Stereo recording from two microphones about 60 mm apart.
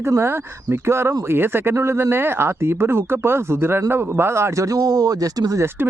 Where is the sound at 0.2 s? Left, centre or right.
Right.